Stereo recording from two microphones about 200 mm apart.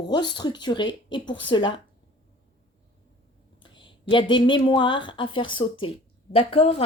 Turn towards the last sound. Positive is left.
turn(degrees=30)  # may be behind; listen again after turning